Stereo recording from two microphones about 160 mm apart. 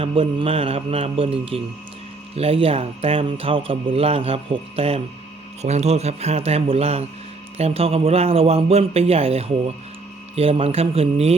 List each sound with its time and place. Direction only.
0.0 s speech: 35° right (ahead or behind)